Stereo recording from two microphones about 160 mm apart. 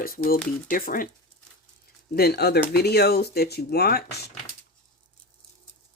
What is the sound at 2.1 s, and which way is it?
Speech, 80° left.